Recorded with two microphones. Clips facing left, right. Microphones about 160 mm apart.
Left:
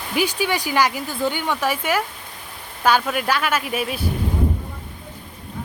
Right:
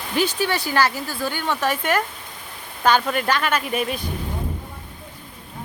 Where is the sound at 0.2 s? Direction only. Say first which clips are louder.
Even; 10° left (ahead or behind).